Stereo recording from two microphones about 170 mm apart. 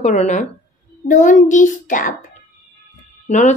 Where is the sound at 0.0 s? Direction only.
40° left (ahead or behind).